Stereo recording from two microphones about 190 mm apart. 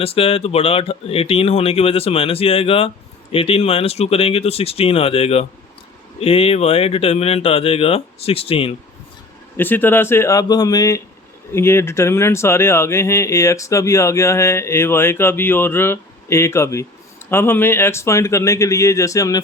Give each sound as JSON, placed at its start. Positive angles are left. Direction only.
{"t": 0.0, "sound": "speech", "side_deg": 30}
{"t": 9.6, "sound": "speech", "side_deg": 10}